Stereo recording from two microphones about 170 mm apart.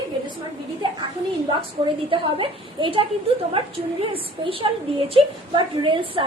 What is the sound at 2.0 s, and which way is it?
A woman's voice, 30° right (ahead or behind).